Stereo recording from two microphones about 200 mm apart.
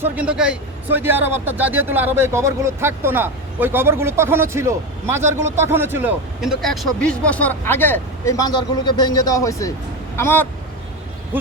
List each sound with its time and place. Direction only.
0.0 s speech: 5° right (ahead or behind); by 10.4 s 10° left (ahead or behind)